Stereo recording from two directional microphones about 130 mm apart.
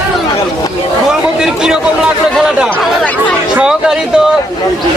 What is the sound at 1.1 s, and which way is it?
A man's voice, 5° right (ahead or behind).